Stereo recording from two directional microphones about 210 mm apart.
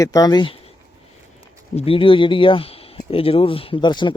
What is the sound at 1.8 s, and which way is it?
Speech, 25° left (ahead or behind).